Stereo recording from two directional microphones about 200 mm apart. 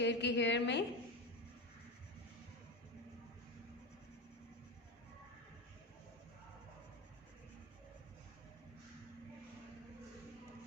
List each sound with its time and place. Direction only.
0.0 s a woman's voice: 60° left (ahead or behind)